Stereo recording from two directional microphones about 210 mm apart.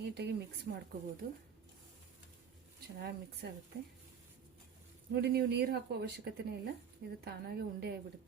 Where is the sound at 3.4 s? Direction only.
55° right (ahead or behind).